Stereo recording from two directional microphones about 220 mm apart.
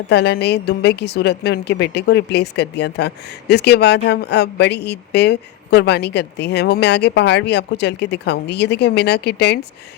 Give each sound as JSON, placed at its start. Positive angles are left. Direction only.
{"t": 0.1, "sound": "speech", "side_deg": 50}